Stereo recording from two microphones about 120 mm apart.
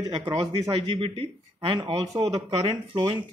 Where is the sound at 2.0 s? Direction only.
30° right (ahead or behind).